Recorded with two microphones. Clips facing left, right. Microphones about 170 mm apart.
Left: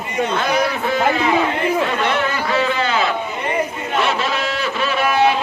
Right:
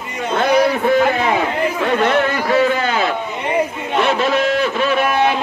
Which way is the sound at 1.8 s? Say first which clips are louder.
Right 4 dB; 45° right (ahead or behind).